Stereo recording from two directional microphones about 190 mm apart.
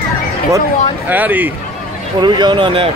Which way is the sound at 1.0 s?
10° right (ahead or behind).